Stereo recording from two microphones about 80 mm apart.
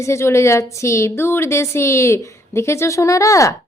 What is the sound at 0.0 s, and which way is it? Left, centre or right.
Speech, left.